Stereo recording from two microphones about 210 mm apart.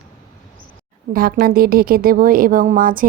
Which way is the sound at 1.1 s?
45° right (ahead or behind).